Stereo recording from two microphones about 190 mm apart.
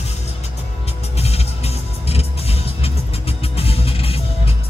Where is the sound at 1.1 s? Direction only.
35° left (ahead or behind).